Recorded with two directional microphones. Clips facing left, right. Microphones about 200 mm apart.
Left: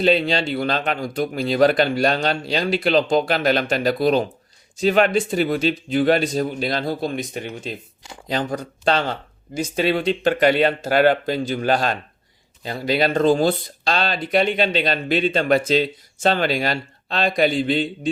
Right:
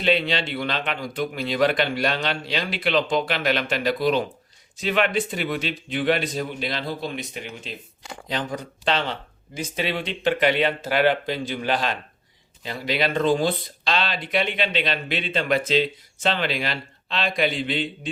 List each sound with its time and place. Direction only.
0.0 s a man's voice: 40° left (ahead or behind)